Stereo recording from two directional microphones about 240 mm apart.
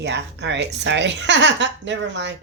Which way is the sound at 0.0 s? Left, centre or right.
Right.